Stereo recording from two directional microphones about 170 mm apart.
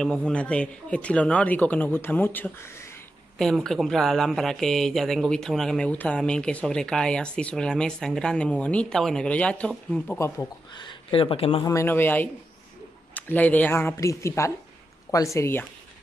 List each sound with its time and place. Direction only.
0.0 s speech: 5° left (ahead or behind)
3.3 s speech: centre (ahead or behind)
10.1 s speech: 15° left (ahead or behind)
10.8 s speech: 30° left (ahead or behind)
11.6 s speech: 15° left (ahead or behind)